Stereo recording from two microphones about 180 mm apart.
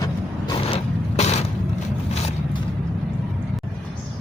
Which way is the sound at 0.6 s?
30° left (ahead or behind).